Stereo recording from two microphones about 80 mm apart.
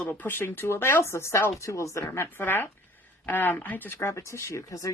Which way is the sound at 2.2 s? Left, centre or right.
Left.